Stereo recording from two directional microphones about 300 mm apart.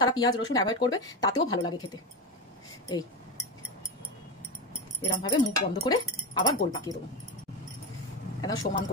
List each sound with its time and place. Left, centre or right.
0.0 s speech: centre
5.0 s speech: centre
8.4 s speech: centre